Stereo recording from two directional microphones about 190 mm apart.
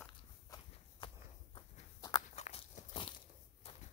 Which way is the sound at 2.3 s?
35° left (ahead or behind).